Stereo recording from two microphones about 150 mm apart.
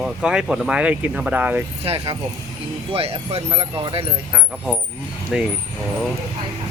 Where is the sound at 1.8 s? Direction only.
40° right (ahead or behind).